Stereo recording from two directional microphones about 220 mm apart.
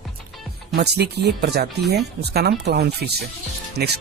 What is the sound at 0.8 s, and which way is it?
Speech, 50° right (ahead or behind).